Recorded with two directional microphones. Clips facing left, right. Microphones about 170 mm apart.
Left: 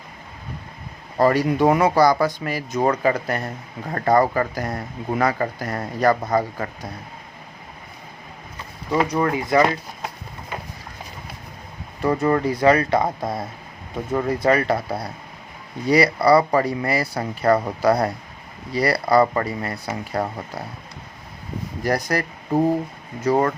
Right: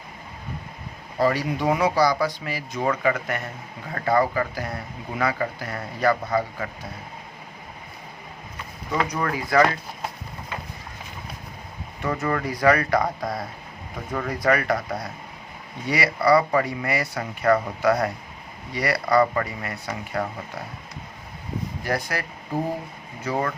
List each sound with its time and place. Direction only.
1.2 s speech: 50° left (ahead or behind)
9.0 s speech: 25° left (ahead or behind)
12.0 s speech: 30° left (ahead or behind)
21.8 s speech: 40° left (ahead or behind)
23.2 s speech: 40° left (ahead or behind)